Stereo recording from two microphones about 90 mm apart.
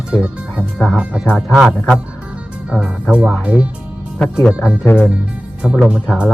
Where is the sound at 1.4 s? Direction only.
Centre (ahead or behind).